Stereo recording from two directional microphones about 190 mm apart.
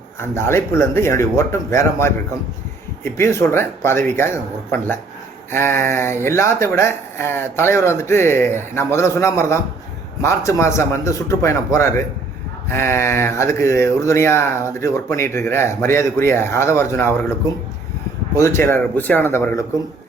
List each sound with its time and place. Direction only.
0.2 s speech: 15° left (ahead or behind)
18.3 s speech: 15° left (ahead or behind)